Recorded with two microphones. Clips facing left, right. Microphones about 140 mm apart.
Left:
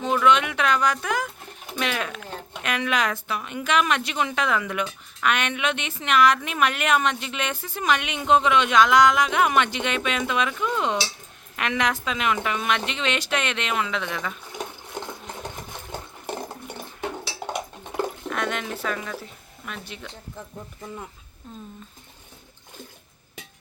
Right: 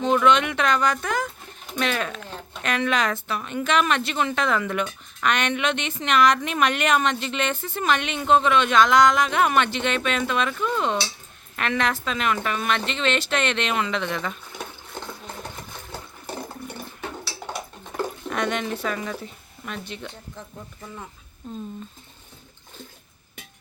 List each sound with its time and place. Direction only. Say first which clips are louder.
0.0 s a woman's voice: right 1 dB; 10° left (ahead or behind)
17.2 s dishes: left 3 dB; 20° left (ahead or behind)
18.3 s speech: right 2 dB; centre (ahead or behind)